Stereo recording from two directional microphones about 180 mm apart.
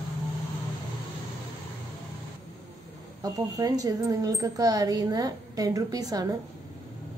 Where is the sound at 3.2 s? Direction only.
20° right (ahead or behind).